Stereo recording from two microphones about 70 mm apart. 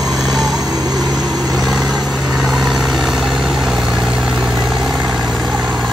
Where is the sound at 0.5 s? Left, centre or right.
Right.